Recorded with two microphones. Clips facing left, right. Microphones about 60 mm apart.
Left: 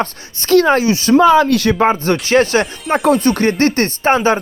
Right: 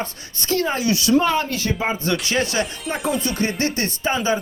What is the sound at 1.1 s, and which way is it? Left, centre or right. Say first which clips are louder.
Speech: left 13 dB; left.